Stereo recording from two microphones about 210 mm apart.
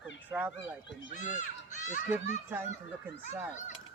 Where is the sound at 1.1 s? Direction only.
35° left (ahead or behind).